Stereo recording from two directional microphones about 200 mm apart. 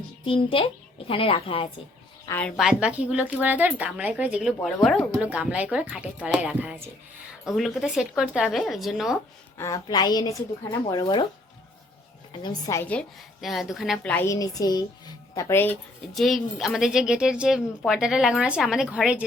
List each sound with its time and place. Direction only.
0.3 s speech: 25° left (ahead or behind)
2.2 s speech: 10° left (ahead or behind)
2.6 s a woman's voice: 5° right (ahead or behind)
9.6 s a woman's voice: 15° left (ahead or behind)
12.4 s a woman's voice: 20° left (ahead or behind); by 19.2 s 5° right (ahead or behind)